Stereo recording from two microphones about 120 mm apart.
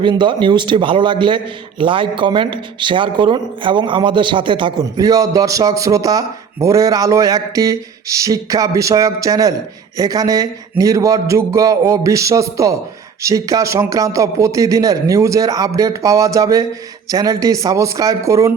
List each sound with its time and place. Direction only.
0.0 s a man's voice: 40° right (ahead or behind)